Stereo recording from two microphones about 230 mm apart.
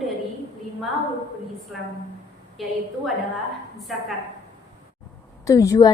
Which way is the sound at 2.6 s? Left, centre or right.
Centre.